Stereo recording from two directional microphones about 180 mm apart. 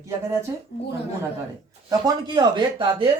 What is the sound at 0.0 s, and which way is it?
Speech, 15° right (ahead or behind).